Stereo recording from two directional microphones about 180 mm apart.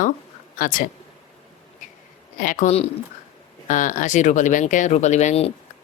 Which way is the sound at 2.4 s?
50° left (ahead or behind).